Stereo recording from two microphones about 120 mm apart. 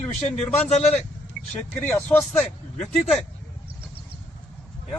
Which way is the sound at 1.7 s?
15° left (ahead or behind).